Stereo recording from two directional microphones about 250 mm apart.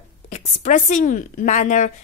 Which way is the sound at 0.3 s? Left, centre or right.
Left.